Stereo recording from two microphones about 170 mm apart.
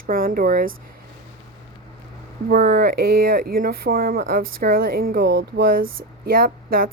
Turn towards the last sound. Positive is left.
turn(degrees=-60)  # may be behind; listen again after turning